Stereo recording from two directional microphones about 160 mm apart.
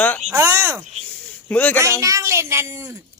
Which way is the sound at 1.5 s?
10° left (ahead or behind).